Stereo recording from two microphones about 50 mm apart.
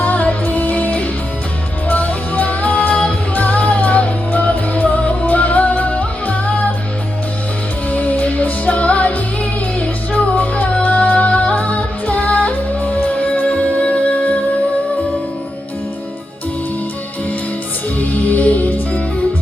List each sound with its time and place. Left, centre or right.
0.0 s music: left
7.9 s music: left
18.1 s music: left